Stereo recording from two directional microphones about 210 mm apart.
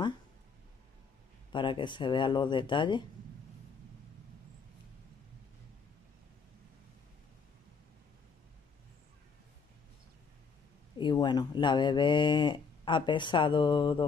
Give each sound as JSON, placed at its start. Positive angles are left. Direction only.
{"t": 1.5, "sound": "speech", "side_deg": 20}
{"t": 11.0, "sound": "speech", "side_deg": 20}